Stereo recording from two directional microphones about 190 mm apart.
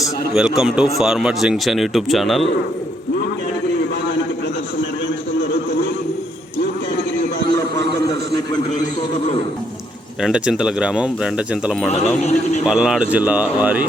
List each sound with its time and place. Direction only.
0.3 s speech: 5° right (ahead or behind)
7.5 s a sound: 15° left (ahead or behind)
10.2 s speech: 5° right (ahead or behind)
12.2 s a man's voice: 40° left (ahead or behind)
12.6 s speech: 5° right (ahead or behind)